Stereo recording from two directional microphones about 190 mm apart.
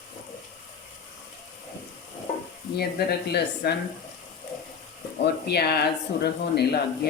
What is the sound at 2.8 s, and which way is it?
Speech, 55° left (ahead or behind).